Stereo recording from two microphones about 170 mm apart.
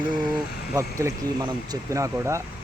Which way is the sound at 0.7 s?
15° right (ahead or behind).